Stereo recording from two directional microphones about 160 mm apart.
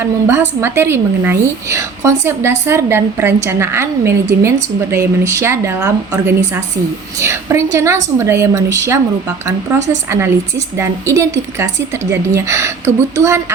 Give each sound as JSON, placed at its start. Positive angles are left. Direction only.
{"t": 0.0, "sound": "a woman's voice", "side_deg": -15}